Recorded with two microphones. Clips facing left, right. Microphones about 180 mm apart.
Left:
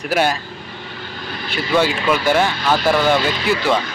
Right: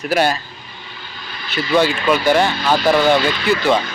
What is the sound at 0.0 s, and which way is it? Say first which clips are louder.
Speech: right 1 dB; 10° left (ahead or behind).